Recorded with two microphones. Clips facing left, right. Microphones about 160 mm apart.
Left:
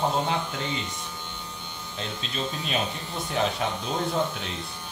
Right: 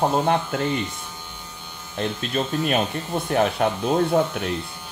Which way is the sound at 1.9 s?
55° right (ahead or behind).